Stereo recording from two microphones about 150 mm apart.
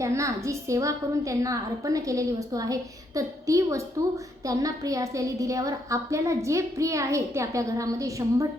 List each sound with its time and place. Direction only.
0.0 s a woman's voice: 20° right (ahead or behind)